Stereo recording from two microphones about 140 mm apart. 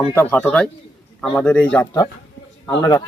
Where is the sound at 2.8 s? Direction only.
30° left (ahead or behind).